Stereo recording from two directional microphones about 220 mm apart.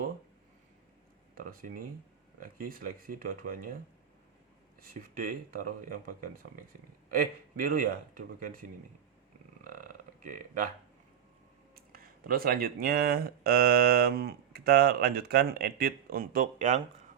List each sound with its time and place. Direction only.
1.4 s speech: 40° right (ahead or behind)
4.8 s speech: 40° right (ahead or behind)
9.6 s burping: 40° right (ahead or behind)
11.7 s speech: 40° right (ahead or behind)